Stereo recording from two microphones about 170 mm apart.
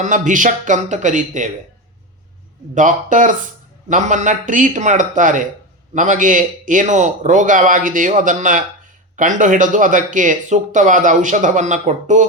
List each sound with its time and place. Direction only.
0.0 s speech: 50° right (ahead or behind)
2.7 s speech: 50° right (ahead or behind)